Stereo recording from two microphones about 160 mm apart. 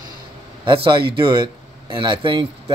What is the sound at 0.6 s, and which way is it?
Speech, 30° right (ahead or behind).